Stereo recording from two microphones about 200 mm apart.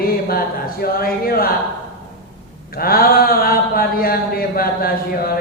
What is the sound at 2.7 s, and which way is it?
Speech, 50° left (ahead or behind).